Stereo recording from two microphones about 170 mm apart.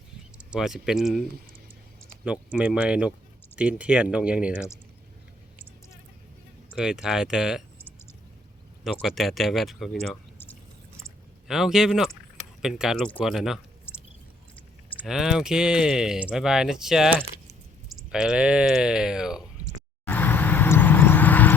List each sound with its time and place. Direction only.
0.3 s speech: 5° right (ahead or behind)
2.2 s speech: 5° right (ahead or behind)
6.7 s speech: 5° right (ahead or behind)
11.4 s speech: centre (ahead or behind)
15.0 s speech: centre (ahead or behind)
20.1 s vehicle: 10° left (ahead or behind)